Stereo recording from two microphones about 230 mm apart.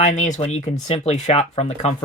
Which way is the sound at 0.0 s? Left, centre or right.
Left.